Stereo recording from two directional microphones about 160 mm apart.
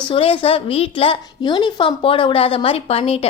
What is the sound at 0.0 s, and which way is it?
A woman's voice, 35° left (ahead or behind).